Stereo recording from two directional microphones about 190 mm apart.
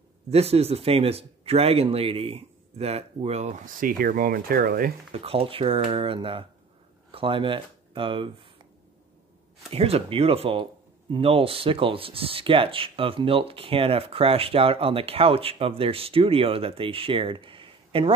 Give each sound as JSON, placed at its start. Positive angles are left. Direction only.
{"t": 0.3, "sound": "speech", "side_deg": -30}
{"t": 5.1, "sound": "speech", "side_deg": -30}
{"t": 9.7, "sound": "speech", "side_deg": -30}